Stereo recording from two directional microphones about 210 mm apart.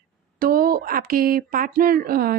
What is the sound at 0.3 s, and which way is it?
Speech, 45° right (ahead or behind).